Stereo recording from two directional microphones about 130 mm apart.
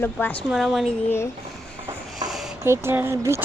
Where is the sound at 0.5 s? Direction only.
Centre (ahead or behind).